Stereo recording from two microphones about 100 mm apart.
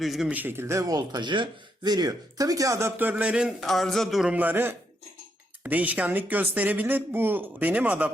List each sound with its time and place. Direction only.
0.0 s a man's voice: centre (ahead or behind)
0.3 s speech: 20° right (ahead or behind)
3.6 s a man's voice: centre (ahead or behind)
4.3 s speech: 15° right (ahead or behind)